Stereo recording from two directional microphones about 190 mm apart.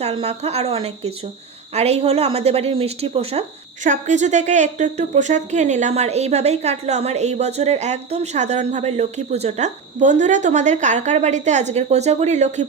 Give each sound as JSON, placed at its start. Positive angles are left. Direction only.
{"t": 0.0, "sound": "a woman's voice", "side_deg": -30}